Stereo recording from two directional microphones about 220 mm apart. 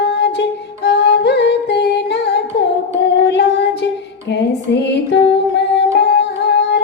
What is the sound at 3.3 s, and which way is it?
Female singing, 50° left (ahead or behind).